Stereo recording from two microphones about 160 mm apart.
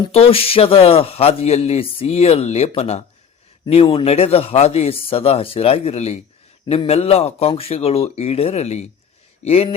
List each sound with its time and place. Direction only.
0.1 s speech: 35° left (ahead or behind)